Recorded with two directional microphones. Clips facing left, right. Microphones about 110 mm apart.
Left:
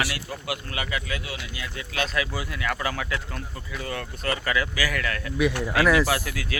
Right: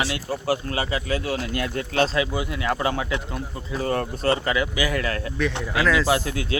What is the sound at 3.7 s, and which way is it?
Speech, 35° right (ahead or behind).